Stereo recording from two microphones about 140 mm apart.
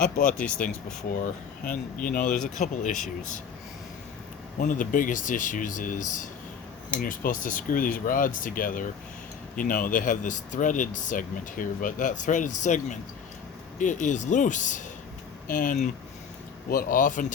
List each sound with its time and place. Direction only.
0.0 s speech: 90° left
0.4 s speech: 10° left (ahead or behind)
2.0 s speech: 75° left (ahead or behind)
4.6 s speech: 75° left (ahead or behind)
7.0 s speech: 80° left; by 14.8 s 65° left (ahead or behind)
15.4 s speech: 85° left
16.6 s speech: 85° left; by 17.3 s 70° left (ahead or behind)